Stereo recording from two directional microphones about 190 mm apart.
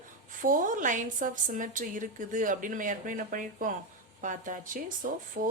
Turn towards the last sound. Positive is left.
turn(degrees=-45)  # may be behind; listen again after turning